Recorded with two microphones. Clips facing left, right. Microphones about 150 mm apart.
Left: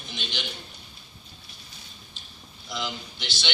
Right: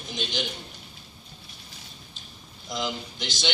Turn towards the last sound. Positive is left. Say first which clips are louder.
# right 4 dB
turn(degrees=-45)  # may be behind; listen again after turning